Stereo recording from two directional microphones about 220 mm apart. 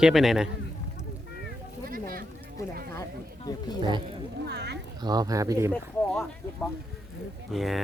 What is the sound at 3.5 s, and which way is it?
Speech, 15° left (ahead or behind).